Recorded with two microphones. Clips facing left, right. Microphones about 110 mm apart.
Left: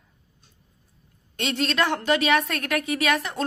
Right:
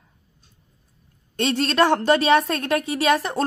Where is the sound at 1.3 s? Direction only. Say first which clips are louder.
Right 5 dB; 35° right (ahead or behind).